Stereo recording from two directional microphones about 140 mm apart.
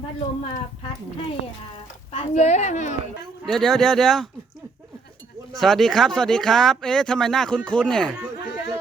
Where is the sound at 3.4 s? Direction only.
5° left (ahead or behind).